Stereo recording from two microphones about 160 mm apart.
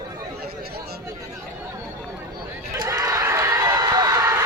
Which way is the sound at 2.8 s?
20° right (ahead or behind).